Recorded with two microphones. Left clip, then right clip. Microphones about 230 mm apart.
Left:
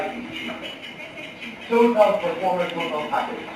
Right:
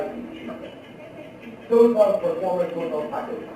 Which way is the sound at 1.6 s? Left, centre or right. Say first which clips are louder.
Even; centre.